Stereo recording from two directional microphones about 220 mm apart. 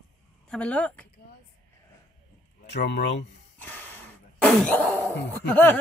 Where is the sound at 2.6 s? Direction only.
50° left (ahead or behind).